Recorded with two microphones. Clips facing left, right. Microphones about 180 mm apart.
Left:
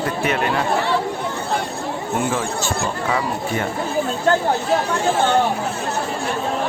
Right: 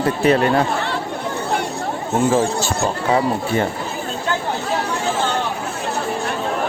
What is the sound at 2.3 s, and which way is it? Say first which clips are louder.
Speech: right 5 dB; 35° right (ahead or behind).